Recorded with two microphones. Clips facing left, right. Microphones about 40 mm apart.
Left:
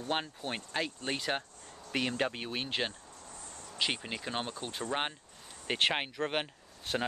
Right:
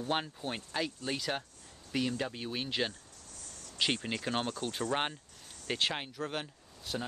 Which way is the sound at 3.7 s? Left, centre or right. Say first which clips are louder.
Right 1 dB; centre.